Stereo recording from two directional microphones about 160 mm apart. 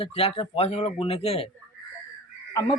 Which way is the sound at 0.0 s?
40° left (ahead or behind).